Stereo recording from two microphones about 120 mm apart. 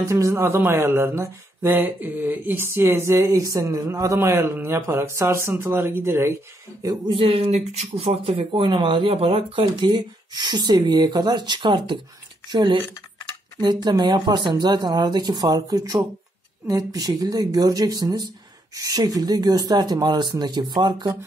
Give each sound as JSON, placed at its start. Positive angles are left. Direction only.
{"t": 0.0, "sound": "speech", "side_deg": -25}
{"t": 6.8, "sound": "speech", "side_deg": -30}
{"t": 7.2, "sound": "speech", "side_deg": -55}